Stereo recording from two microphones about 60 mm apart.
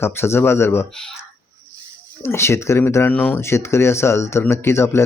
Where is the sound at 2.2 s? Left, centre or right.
Left.